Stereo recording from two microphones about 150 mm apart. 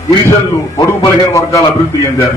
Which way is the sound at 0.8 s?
20° left (ahead or behind).